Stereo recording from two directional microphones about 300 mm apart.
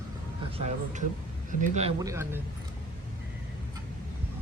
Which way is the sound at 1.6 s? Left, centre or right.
Right.